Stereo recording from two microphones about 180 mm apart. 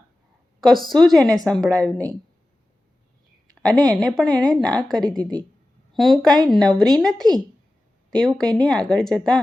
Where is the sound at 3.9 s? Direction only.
Centre (ahead or behind).